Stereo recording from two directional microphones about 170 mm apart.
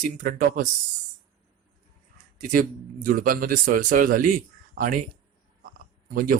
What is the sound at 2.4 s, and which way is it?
Speech, 55° right (ahead or behind).